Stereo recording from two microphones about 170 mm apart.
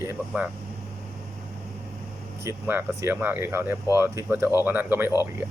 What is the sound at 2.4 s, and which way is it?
Speech, 15° right (ahead or behind).